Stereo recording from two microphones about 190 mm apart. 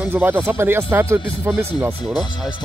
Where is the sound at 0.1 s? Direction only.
10° right (ahead or behind).